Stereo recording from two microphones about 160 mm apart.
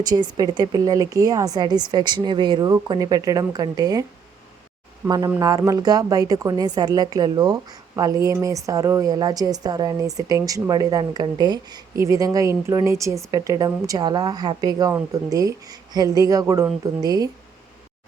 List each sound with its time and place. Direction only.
0.0 s a woman's voice: 25° right (ahead or behind)
5.0 s a woman's voice: 25° right (ahead or behind)